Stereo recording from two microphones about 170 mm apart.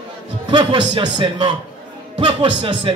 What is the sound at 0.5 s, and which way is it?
Speech, 30° right (ahead or behind).